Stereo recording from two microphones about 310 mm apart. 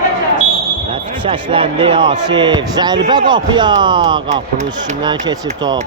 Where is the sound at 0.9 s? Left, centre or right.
Centre.